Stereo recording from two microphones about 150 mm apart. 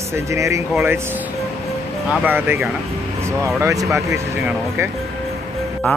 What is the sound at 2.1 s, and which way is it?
Speech, 10° right (ahead or behind).